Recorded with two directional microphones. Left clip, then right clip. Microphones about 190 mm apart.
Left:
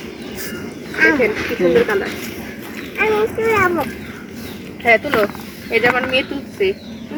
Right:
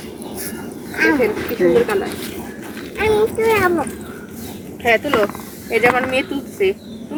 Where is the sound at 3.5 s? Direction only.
35° right (ahead or behind).